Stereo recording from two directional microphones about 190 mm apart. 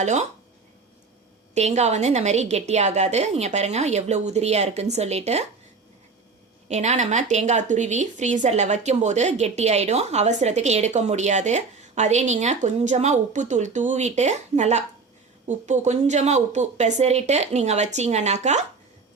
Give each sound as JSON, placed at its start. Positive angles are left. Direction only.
{"t": 0.0, "sound": "a woman's voice", "side_deg": -40}
{"t": 1.5, "sound": "a woman's voice", "side_deg": -35}
{"t": 6.7, "sound": "a woman's voice", "side_deg": -35}